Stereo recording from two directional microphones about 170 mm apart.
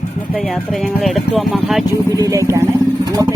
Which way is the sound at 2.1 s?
20° right (ahead or behind).